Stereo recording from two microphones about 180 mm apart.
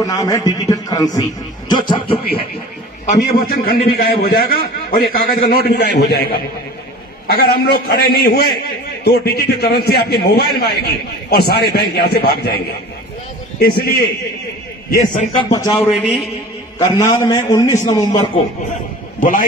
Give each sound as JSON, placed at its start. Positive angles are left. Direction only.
{"t": 0.0, "sound": "a man's voice", "side_deg": 20}
{"t": 3.1, "sound": "a man's voice", "side_deg": 55}
{"t": 7.2, "sound": "a man's voice", "side_deg": 60}
{"t": 13.6, "sound": "a man's voice", "side_deg": 60}
{"t": 15.3, "sound": "a man's voice", "side_deg": 20}